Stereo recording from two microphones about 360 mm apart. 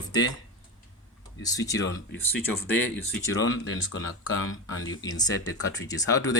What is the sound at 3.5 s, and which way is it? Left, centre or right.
Speech, left.